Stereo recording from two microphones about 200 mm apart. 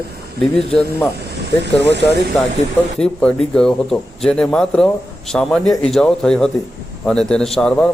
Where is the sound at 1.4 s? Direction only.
60° right (ahead or behind).